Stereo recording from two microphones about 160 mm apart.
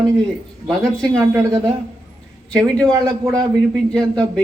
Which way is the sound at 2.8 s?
25° right (ahead or behind).